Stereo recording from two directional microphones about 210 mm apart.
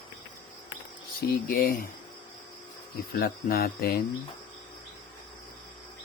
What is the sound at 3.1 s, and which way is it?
Speech, 45° left (ahead or behind).